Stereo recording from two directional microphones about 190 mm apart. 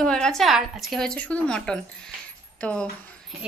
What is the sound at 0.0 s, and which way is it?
A woman's voice, 5° left (ahead or behind).